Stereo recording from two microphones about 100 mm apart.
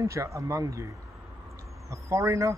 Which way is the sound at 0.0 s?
30° right (ahead or behind).